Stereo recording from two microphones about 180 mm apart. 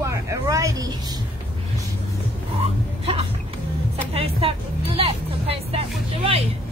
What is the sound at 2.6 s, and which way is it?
Speech, 35° right (ahead or behind).